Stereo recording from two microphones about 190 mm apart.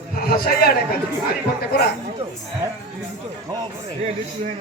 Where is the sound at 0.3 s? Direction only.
55° left (ahead or behind).